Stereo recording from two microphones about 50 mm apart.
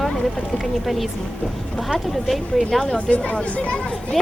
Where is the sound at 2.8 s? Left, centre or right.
Centre.